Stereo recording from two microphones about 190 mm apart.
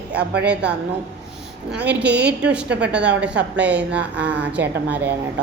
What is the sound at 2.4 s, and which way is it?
Speech, 5° right (ahead or behind).